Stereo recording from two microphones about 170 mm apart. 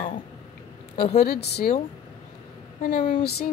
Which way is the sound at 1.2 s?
75° left (ahead or behind).